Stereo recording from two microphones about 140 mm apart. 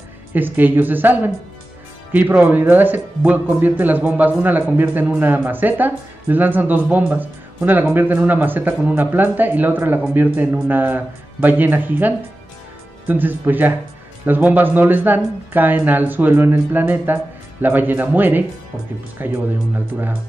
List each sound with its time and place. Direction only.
0.3 s speech: 15° right (ahead or behind)